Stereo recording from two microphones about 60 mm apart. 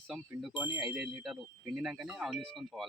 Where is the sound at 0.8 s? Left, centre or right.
Centre.